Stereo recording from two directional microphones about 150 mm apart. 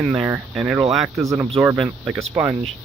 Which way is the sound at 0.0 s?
10° right (ahead or behind).